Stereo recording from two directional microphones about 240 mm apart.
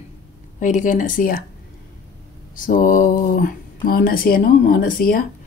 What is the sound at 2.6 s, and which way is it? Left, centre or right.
Speech, left.